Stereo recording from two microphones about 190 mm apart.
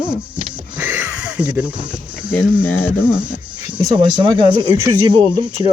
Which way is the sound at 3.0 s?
5° right (ahead or behind).